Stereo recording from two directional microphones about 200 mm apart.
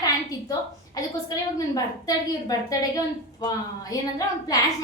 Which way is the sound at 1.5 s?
20° left (ahead or behind).